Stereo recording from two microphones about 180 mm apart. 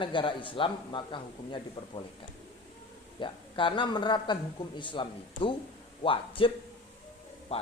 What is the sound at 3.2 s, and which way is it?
Speech, 25° left (ahead or behind).